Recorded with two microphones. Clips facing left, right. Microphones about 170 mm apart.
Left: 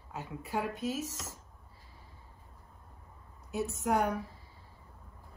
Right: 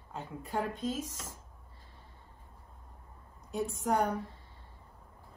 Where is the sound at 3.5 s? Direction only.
5° left (ahead or behind).